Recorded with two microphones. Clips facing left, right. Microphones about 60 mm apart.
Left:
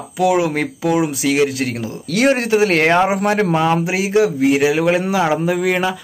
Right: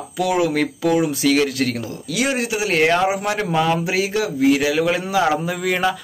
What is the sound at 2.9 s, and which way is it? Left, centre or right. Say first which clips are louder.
A man's voice: left 4 dB; left.